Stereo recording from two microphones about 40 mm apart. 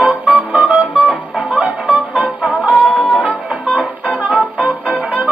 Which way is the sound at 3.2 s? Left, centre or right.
Right.